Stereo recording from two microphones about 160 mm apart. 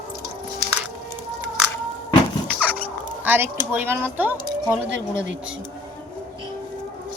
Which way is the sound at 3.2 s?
10° right (ahead or behind).